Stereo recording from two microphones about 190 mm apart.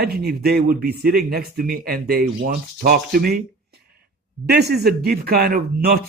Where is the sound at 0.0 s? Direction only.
55° right (ahead or behind).